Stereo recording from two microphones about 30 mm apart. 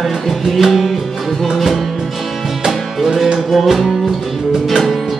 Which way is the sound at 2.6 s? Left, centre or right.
Centre.